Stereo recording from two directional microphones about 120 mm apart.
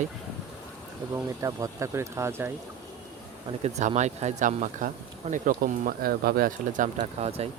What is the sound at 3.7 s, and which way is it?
Speech, 75° right (ahead or behind).